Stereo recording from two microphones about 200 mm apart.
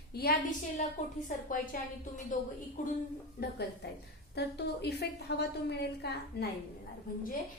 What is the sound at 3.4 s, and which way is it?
A woman's voice, 55° left (ahead or behind).